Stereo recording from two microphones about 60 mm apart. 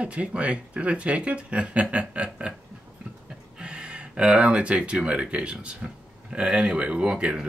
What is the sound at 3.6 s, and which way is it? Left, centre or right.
Speech, centre.